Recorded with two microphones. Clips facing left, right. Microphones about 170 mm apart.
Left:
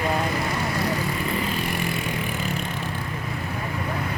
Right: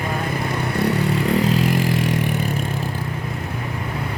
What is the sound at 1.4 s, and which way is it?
Vehicle, 90° right.